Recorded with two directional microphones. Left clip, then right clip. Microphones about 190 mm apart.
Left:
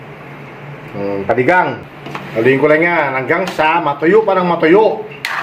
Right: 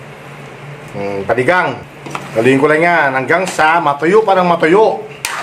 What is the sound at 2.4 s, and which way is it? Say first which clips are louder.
Speech: even; 25° right (ahead or behind).